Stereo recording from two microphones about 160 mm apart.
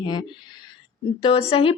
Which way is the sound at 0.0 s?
25° left (ahead or behind).